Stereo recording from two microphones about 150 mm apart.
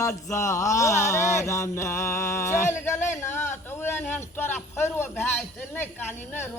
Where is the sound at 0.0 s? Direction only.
20° left (ahead or behind).